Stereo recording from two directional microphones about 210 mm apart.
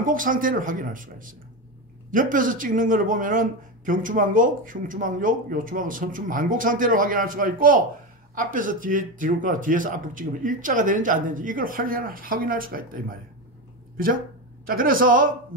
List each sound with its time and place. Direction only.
0.0 s a man's voice: 40° right (ahead or behind)